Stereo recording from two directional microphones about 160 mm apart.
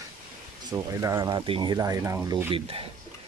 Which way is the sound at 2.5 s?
35° right (ahead or behind).